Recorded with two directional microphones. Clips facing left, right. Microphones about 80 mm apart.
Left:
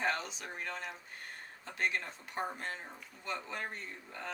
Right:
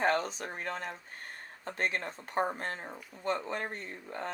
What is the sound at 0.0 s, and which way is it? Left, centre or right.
Speech, right.